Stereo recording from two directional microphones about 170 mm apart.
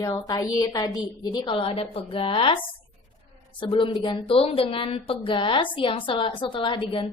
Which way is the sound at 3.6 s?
30° left (ahead or behind).